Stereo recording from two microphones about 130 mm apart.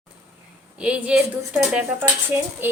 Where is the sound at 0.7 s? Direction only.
10° right (ahead or behind).